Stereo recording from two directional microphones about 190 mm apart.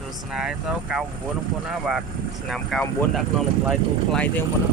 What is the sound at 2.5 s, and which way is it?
Speech, centre (ahead or behind).